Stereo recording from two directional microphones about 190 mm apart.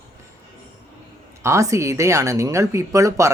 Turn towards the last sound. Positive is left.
turn(degrees=-15)  # may be behind; listen again after turning